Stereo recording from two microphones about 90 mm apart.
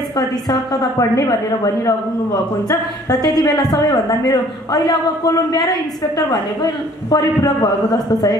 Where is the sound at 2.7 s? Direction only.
45° left (ahead or behind).